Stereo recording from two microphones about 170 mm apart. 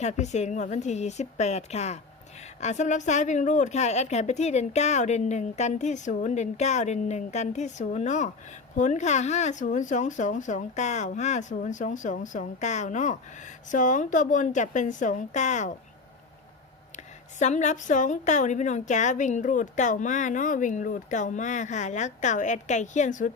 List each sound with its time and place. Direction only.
0.0 s a woman's voice: 40° left (ahead or behind)
17.4 s a woman's voice: 45° left (ahead or behind)